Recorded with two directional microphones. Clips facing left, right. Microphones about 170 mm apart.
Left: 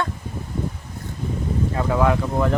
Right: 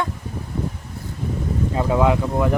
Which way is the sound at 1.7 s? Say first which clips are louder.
Right 2 dB; 15° right (ahead or behind).